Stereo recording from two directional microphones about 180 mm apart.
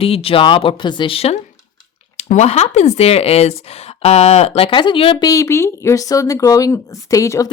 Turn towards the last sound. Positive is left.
turn(degrees=20)  # may be behind; listen again after turning